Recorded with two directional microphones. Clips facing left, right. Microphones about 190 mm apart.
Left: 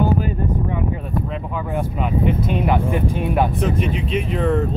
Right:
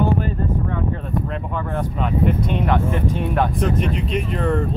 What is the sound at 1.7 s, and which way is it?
Speech, 5° left (ahead or behind).